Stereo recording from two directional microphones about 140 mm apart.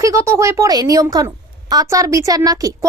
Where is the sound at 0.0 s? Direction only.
20° right (ahead or behind).